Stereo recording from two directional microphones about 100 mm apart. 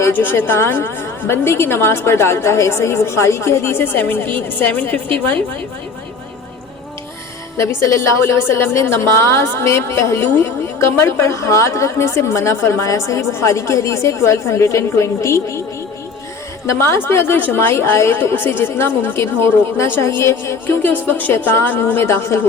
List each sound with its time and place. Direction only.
0.0 s a woman's voice: 20° left (ahead or behind)
7.5 s a woman's voice: 30° left (ahead or behind)
16.6 s a woman's voice: 25° left (ahead or behind)